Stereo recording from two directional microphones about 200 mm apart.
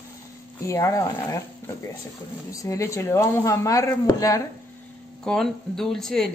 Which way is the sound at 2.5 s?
15° left (ahead or behind).